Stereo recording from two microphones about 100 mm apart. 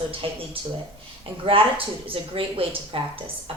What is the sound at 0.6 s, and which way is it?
Speech, 70° right (ahead or behind).